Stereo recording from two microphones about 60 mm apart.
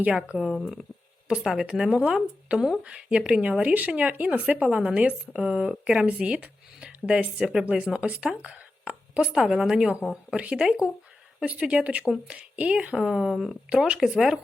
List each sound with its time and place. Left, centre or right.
0.0 s speech: centre
0.3 s a woman's voice: centre
13.7 s speech: centre